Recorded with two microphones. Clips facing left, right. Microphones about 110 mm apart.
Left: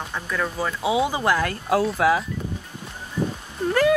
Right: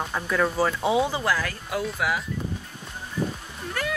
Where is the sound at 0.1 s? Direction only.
5° right (ahead or behind).